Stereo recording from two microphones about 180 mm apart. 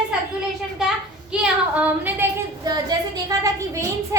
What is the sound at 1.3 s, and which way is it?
Speech, 5° right (ahead or behind).